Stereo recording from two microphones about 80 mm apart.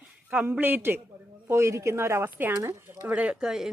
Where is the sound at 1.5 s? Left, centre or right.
Right.